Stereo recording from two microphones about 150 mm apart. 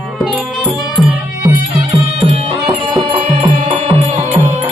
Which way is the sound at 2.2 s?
45° right (ahead or behind).